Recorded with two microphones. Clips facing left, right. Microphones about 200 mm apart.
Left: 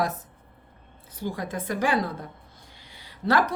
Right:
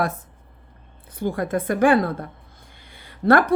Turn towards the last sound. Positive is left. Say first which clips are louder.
# right 6 dB
turn(degrees=-55)  # may be behind; listen again after turning